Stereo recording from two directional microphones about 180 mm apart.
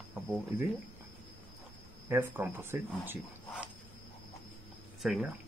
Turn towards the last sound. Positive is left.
turn(degrees=0)  # may be behind; listen again after turning